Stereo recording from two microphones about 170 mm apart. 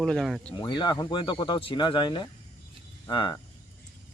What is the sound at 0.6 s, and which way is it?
A man's voice, 25° left (ahead or behind).